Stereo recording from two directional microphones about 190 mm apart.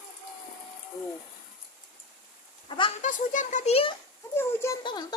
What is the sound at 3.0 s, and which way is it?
Speech, 40° left (ahead or behind).